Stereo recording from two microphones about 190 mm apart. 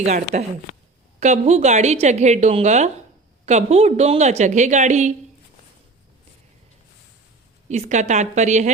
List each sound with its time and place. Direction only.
0.0 s a woman's voice: 35° right (ahead or behind)
7.7 s a woman's voice: 40° right (ahead or behind)